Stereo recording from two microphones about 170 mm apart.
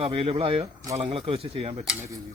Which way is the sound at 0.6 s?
20° right (ahead or behind).